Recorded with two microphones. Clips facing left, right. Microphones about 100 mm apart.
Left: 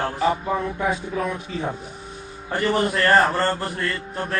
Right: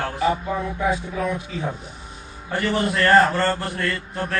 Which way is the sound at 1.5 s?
40° left (ahead or behind).